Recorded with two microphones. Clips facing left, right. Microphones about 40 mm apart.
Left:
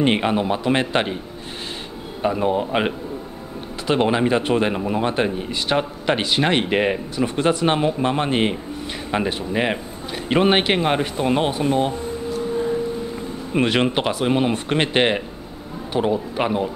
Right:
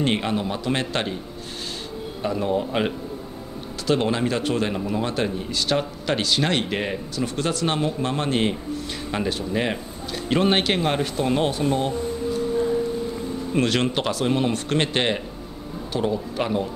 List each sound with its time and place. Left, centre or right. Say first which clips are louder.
0.0 s a man's voice: left 4 dB; left
2.2 s a man's voice: left 4 dB; left
13.5 s a man's voice: left 3 dB; centre